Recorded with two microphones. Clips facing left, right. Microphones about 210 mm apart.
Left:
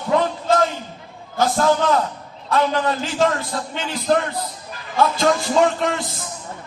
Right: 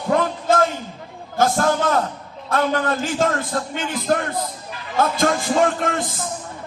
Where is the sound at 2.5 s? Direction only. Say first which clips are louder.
Left 1 dB; 50° right (ahead or behind).